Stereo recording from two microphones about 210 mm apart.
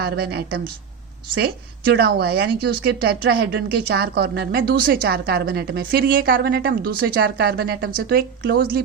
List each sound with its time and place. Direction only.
0.0 s a woman's voice: 50° right (ahead or behind)